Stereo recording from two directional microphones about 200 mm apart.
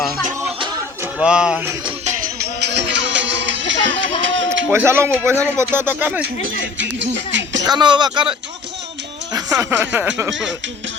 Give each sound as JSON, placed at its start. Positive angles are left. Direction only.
{"t": 1.0, "sound": "speech", "side_deg": -5}
{"t": 2.6, "sound": "music", "side_deg": -60}
{"t": 4.4, "sound": "speech", "side_deg": -10}
{"t": 6.4, "sound": "speech", "side_deg": -65}
{"t": 7.6, "sound": "speech", "side_deg": -20}